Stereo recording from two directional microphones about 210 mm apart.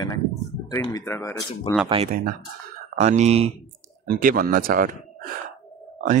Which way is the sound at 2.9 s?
30° right (ahead or behind).